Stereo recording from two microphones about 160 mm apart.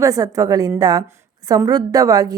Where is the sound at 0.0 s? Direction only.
20° right (ahead or behind).